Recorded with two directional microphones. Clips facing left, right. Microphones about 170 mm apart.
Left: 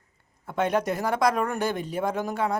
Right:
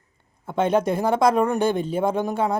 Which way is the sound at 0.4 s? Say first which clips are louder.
Right 4 dB; 25° right (ahead or behind).